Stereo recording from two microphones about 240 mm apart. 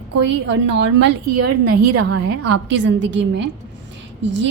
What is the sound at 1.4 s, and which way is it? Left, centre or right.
Speech, right.